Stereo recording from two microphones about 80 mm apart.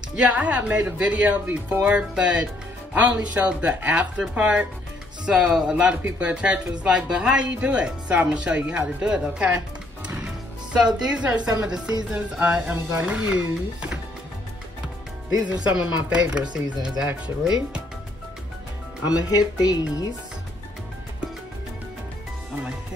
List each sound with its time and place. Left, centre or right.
0.2 s speech: centre
10.0 s music: centre
10.8 s speech: centre
15.2 s speech: right
15.6 s speech: centre